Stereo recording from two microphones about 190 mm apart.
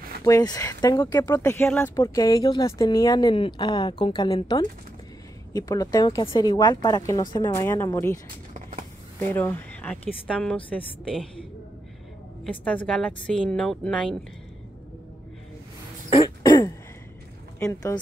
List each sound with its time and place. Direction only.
0.2 s speech: 20° left (ahead or behind)
8.5 s a sound: 40° right (ahead or behind)
9.2 s a woman's voice: 10° left (ahead or behind)
12.4 s a woman's voice: 5° left (ahead or behind)
16.1 s throat clearing: 25° left (ahead or behind)
17.6 s a woman's voice: 15° left (ahead or behind)